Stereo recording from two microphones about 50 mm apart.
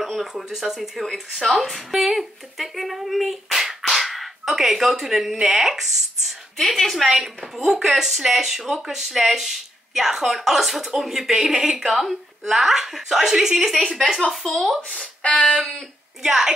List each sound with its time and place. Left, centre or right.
0.0 s speech: centre
13.7 s speech: centre
15.2 s a sound: left
16.2 s a woman's voice: centre